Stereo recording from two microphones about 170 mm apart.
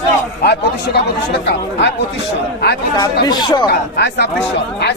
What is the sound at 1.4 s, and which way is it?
Speech, 90° left.